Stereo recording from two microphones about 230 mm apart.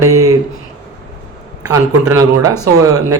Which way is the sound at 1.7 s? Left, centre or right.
Centre.